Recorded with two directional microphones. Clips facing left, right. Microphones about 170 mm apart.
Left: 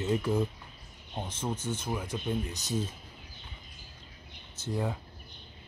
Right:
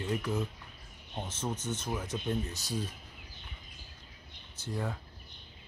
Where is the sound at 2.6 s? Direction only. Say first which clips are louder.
Left 3 dB; 20° left (ahead or behind).